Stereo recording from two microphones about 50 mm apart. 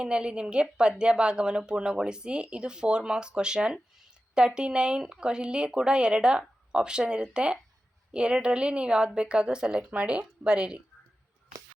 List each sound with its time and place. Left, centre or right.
0.0 s speech: centre